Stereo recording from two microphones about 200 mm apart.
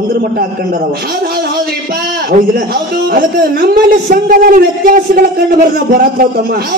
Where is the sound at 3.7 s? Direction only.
45° right (ahead or behind).